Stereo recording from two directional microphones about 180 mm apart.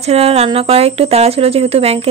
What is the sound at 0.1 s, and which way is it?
Speech, 35° right (ahead or behind).